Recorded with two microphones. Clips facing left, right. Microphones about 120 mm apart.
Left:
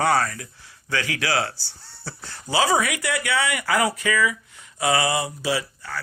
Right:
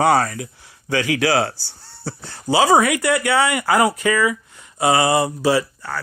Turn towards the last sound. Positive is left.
turn(degrees=-45)  # may be behind; listen again after turning